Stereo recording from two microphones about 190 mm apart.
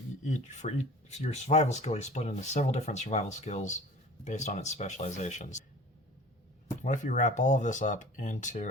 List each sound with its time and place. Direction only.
0.3 s speech: 40° left (ahead or behind)
6.8 s speech: 40° left (ahead or behind)